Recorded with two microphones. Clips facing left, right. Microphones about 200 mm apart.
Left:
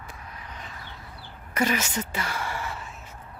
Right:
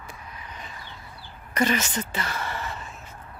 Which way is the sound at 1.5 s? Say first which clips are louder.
Right 1 dB; 10° left (ahead or behind).